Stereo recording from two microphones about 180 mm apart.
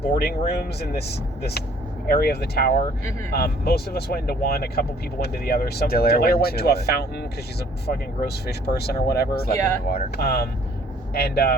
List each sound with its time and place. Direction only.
0.0 s speech: 60° left (ahead or behind)